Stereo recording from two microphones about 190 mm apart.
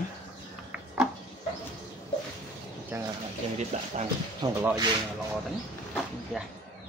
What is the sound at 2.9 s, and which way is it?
Speech, 15° right (ahead or behind).